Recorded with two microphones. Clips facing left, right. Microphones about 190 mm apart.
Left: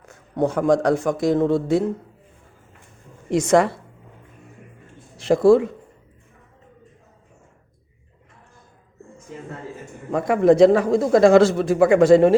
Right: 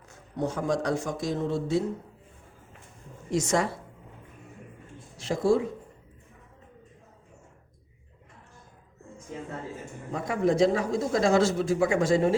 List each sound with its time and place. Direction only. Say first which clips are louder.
0.3 s a man's voice: left 9 dB; 55° left (ahead or behind)
3.2 s a woman's voice: left 9 dB; 60° left (ahead or behind)
5.1 s speech: left 10 dB; 65° left (ahead or behind)
10.1 s a man's voice: left 10 dB; 70° left (ahead or behind)